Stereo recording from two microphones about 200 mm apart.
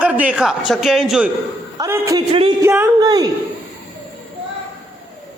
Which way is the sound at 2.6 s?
10° right (ahead or behind).